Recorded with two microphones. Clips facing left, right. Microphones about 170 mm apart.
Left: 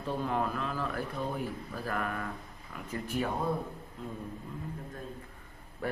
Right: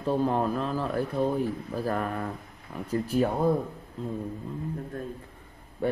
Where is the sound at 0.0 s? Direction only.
35° right (ahead or behind).